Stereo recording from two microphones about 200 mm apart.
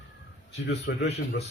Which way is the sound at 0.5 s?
55° left (ahead or behind).